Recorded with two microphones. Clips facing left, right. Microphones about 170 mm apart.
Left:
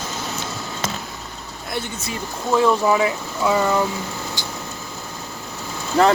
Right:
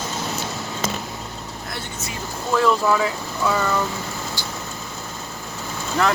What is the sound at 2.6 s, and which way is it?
Speech, 20° left (ahead or behind).